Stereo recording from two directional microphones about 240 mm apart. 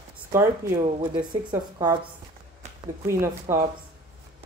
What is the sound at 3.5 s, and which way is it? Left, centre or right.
Speech, centre.